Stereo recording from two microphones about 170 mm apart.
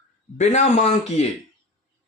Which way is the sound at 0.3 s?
45° left (ahead or behind).